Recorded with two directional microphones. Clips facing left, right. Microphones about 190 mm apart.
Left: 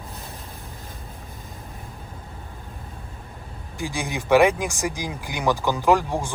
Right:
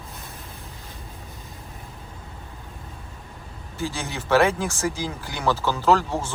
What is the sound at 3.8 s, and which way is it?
Speech, 15° left (ahead or behind).